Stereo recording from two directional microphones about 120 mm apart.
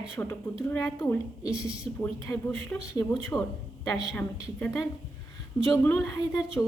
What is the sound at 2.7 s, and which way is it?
Speech, 10° left (ahead or behind).